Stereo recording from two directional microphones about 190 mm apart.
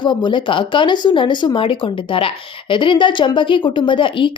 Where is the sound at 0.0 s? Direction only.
25° left (ahead or behind).